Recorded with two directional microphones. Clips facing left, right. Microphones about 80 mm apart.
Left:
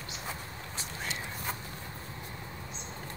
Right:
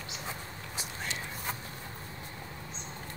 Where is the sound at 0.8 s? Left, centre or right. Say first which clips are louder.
Even; centre.